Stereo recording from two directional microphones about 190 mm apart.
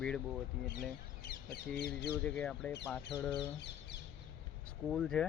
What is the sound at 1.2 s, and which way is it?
Speech, 55° left (ahead or behind).